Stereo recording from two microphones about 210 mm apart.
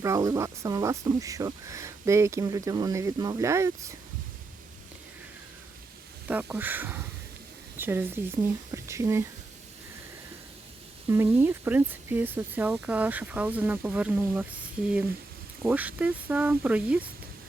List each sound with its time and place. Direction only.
0.0 s speech: 15° right (ahead or behind)
6.2 s speech: 10° right (ahead or behind)
11.1 s speech: 10° right (ahead or behind)
15.6 s speech: 5° right (ahead or behind)